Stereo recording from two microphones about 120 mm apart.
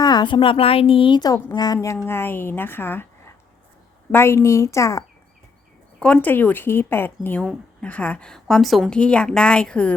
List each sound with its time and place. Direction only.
0.0 s speech: 35° left (ahead or behind)
2.0 s a woman's voice: 20° left (ahead or behind)
6.0 s speech: 10° left (ahead or behind)